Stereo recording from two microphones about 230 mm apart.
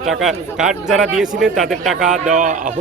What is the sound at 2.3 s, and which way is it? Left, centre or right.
Speech, right.